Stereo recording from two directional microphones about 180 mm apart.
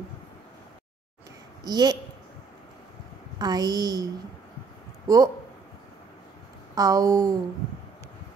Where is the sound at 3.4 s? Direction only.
20° right (ahead or behind).